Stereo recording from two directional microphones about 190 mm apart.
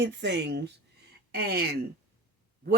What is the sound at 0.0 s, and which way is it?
A woman's voice, 65° right (ahead or behind).